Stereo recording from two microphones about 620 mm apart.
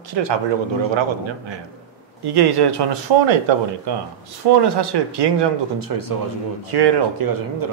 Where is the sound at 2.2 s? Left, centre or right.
Right.